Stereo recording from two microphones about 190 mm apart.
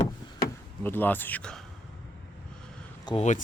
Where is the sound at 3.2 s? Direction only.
40° left (ahead or behind).